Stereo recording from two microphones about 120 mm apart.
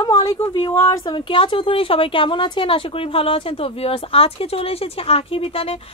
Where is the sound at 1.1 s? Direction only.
45° left (ahead or behind).